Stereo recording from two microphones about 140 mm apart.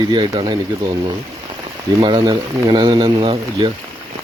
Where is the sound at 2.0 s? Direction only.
30° right (ahead or behind).